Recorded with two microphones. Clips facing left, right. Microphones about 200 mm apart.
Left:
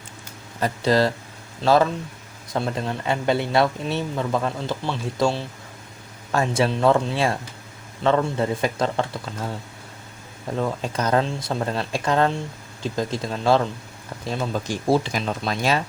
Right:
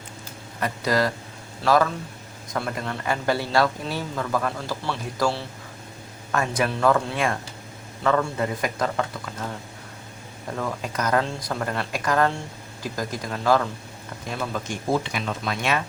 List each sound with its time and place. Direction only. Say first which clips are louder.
0.6 s speech: left 4 dB; 30° left (ahead or behind)
10.6 s speech: left 3 dB; 25° left (ahead or behind)